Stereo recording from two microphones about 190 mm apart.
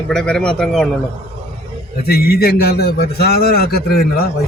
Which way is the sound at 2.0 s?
55° left (ahead or behind).